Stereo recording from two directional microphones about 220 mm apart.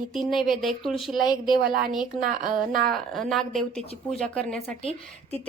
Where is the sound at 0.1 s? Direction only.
Centre (ahead or behind).